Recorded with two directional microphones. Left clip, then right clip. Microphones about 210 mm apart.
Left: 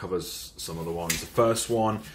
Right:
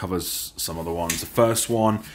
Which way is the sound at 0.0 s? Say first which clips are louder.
Right 3 dB; 50° right (ahead or behind).